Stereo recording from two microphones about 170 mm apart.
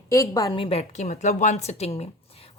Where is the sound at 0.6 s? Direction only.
35° left (ahead or behind).